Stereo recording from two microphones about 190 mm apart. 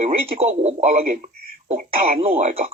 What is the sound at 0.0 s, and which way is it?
Speech, 35° right (ahead or behind).